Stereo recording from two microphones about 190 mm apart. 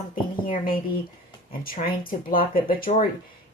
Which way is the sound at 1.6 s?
50° left (ahead or behind).